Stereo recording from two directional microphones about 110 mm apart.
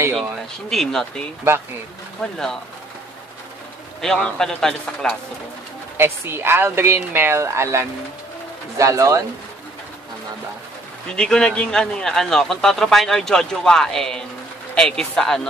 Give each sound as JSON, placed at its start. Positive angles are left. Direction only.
{"t": 0.1, "sound": "a man's voice", "side_deg": 0}
{"t": 4.0, "sound": "a man's voice", "side_deg": 5}
{"t": 5.9, "sound": "speech", "side_deg": -20}
{"t": 11.1, "sound": "a man's voice", "side_deg": 5}